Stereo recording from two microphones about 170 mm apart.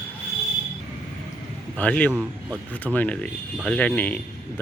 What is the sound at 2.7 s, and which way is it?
Speech, 10° left (ahead or behind).